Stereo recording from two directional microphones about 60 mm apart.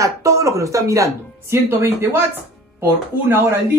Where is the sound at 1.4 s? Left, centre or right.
Right.